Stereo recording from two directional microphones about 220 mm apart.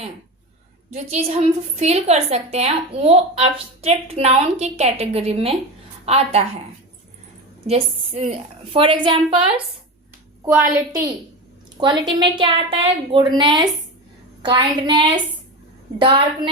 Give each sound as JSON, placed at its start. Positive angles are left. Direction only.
{"t": 1.1, "sound": "a woman's voice", "side_deg": -30}
{"t": 7.7, "sound": "a woman's voice", "side_deg": -30}
{"t": 10.4, "sound": "a woman's voice", "side_deg": -10}